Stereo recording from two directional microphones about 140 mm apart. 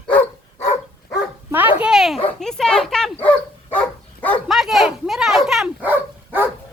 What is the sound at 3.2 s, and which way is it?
Dog, 10° left (ahead or behind).